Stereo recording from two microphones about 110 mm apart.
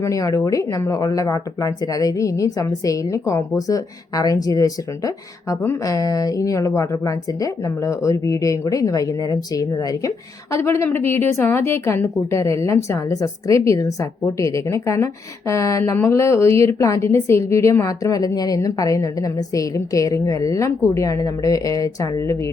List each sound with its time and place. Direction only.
0.0 s a woman's voice: 30° left (ahead or behind)